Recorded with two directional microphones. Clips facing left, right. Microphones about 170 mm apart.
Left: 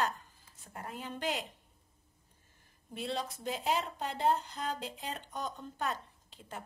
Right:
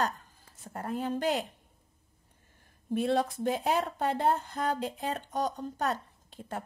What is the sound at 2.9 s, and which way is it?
Speech, 55° right (ahead or behind).